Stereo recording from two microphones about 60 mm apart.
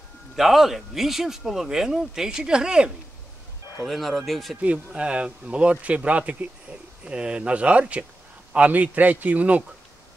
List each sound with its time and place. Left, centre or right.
0.4 s speech: centre
3.8 s speech: centre
4.9 s speech: centre